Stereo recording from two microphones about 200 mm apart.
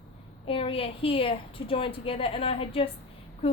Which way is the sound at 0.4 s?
30° left (ahead or behind).